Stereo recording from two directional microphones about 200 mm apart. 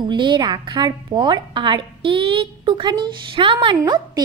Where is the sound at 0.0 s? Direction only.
25° right (ahead or behind).